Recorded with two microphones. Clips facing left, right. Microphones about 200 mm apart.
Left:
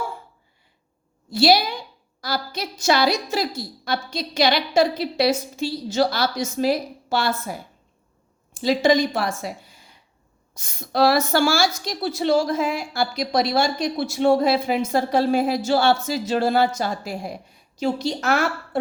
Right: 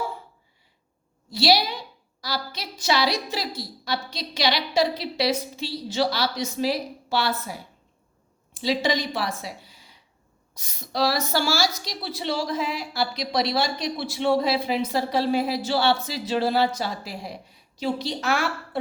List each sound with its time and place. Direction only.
1.3 s a woman's voice: 50° left (ahead or behind)
8.6 s a woman's voice: 45° left (ahead or behind)